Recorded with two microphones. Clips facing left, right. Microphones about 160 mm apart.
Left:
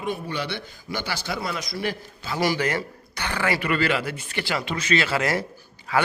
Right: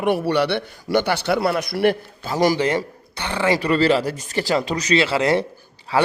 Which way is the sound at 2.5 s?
25° right (ahead or behind).